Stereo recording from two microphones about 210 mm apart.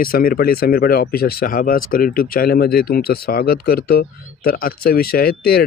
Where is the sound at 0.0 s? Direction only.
45° left (ahead or behind).